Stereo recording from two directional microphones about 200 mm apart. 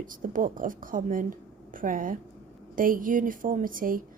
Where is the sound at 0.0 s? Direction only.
40° right (ahead or behind).